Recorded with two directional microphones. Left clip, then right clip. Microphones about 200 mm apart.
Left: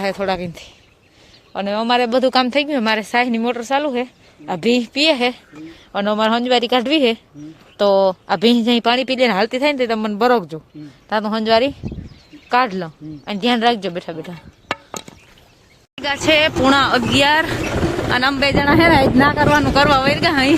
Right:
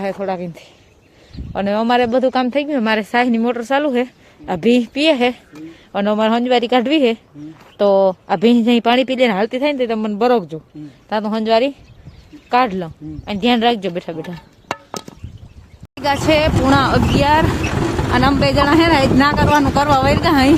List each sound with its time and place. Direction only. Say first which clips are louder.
0.0 s speech: left 1 dB; centre (ahead or behind)
1.5 s speech: right 2 dB; 15° right (ahead or behind)
2.0 s speech: even; centre (ahead or behind)
18.5 s speech: left 2 dB; 15° left (ahead or behind)
19.3 s speech: even; centre (ahead or behind)